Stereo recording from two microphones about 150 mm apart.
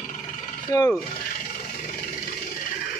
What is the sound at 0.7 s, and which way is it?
Rub, 20° left (ahead or behind).